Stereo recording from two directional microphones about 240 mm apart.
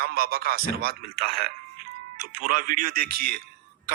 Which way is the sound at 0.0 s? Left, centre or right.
Right.